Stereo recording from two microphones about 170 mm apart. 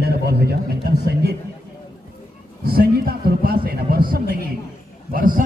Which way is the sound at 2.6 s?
65° right (ahead or behind).